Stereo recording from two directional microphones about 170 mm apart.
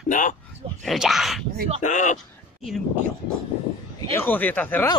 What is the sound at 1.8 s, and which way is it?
Speech, 50° left (ahead or behind).